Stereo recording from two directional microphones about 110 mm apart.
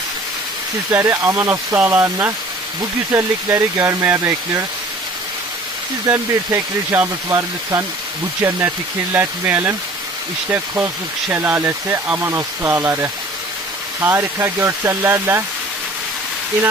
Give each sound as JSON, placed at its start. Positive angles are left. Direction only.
{"t": 0.9, "sound": "speech", "side_deg": -25}
{"t": 6.0, "sound": "speech", "side_deg": -25}